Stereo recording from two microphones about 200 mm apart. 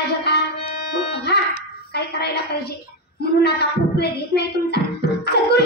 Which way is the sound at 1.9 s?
55° left (ahead or behind).